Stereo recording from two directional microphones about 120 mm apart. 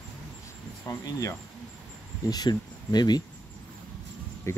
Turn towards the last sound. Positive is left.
turn(degrees=20)  # may be behind; listen again after turning